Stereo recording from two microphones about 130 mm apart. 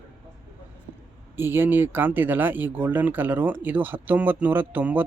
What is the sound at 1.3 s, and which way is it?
Speech, 15° right (ahead or behind).